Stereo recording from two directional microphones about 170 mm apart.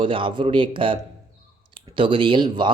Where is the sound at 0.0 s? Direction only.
30° right (ahead or behind).